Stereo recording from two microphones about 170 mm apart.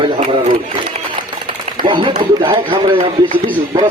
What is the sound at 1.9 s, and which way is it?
Speech, 30° right (ahead or behind).